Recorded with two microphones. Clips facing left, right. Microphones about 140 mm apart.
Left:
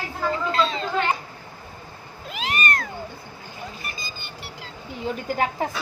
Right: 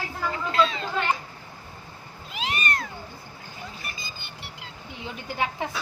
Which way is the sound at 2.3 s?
50° left (ahead or behind).